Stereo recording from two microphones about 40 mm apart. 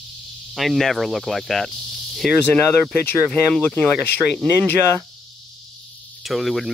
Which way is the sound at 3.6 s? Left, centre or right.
Left.